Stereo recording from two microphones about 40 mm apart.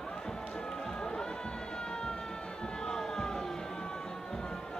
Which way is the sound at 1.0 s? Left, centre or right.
Centre.